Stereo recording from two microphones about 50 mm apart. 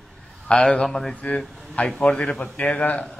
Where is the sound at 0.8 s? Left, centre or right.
Centre.